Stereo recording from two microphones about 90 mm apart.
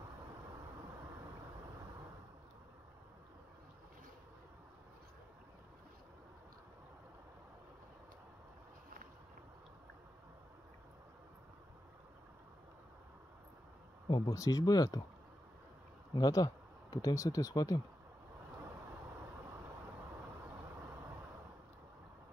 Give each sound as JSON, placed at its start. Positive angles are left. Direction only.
{"t": 14.0, "sound": "speech", "side_deg": 60}
{"t": 14.3, "sound": "speech", "side_deg": 40}
{"t": 16.2, "sound": "speech", "side_deg": 40}